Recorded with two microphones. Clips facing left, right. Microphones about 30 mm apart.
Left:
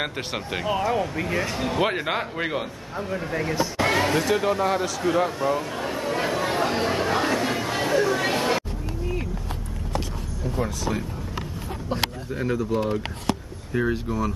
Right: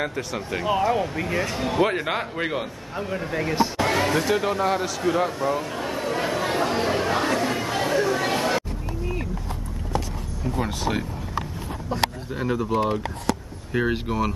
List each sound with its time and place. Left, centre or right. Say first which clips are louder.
0.7 s speech: right 2 dB; centre
3.7 s a sound: even; centre
12.3 s speech: even; centre
12.5 s speech: right 3 dB; right
13.9 s speech: right 2 dB; right